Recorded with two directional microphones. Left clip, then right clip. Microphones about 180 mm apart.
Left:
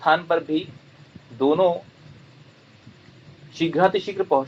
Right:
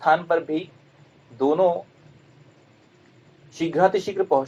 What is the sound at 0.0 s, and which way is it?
A man's voice, 20° right (ahead or behind).